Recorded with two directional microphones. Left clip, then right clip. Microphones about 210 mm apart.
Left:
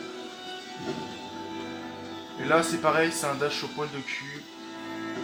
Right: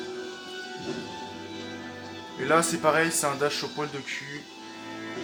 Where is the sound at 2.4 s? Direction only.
35° right (ahead or behind).